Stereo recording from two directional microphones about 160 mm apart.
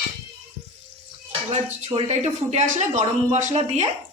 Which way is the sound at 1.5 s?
40° right (ahead or behind).